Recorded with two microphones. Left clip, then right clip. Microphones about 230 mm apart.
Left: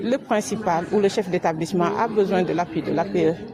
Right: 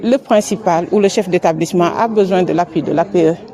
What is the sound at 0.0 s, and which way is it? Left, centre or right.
Speech, right.